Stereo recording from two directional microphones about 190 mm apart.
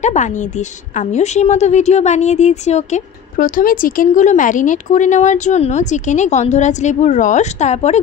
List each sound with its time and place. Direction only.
0.0 s a woman's voice: 40° left (ahead or behind)